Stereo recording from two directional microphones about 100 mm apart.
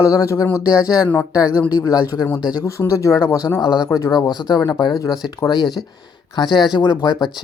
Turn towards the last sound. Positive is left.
turn(degrees=45)  # may be behind; listen again after turning